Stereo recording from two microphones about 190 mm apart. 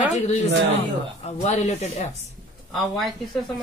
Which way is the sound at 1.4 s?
35° left (ahead or behind).